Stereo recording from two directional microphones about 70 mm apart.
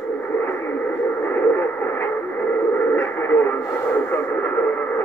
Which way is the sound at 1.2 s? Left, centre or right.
Left.